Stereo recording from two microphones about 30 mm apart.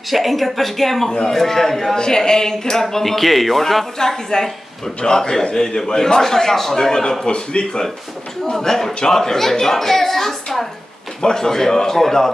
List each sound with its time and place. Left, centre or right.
0.1 s speech: centre
2.0 s speech: left; by 3.8 s centre
4.0 s a man's voice: centre
6.8 s a man's voice: left
8.5 s speech: centre
11.2 s speech: centre